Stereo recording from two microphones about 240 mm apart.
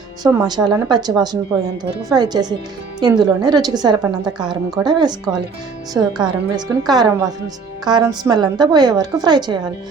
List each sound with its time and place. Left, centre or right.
0.2 s a woman's voice: centre